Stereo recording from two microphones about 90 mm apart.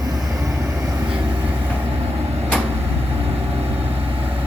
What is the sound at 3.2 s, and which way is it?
Vehicle, 90° right.